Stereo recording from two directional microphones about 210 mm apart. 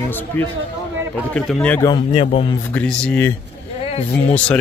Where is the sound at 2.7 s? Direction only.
5° left (ahead or behind).